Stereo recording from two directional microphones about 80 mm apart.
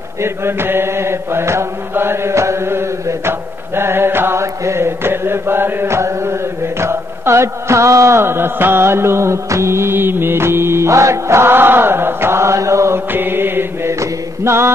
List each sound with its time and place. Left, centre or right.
0.2 s chant: right